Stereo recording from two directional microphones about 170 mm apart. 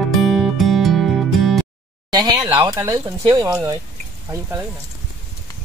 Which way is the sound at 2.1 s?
20° right (ahead or behind).